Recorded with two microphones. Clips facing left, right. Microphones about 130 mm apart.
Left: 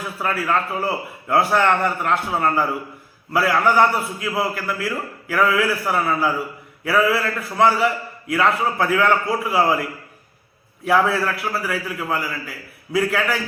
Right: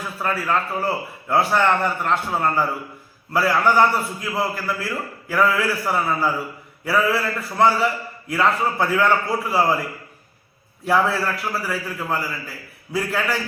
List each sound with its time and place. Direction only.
0.2 s a man's voice: 5° left (ahead or behind)
10.8 s a man's voice: centre (ahead or behind)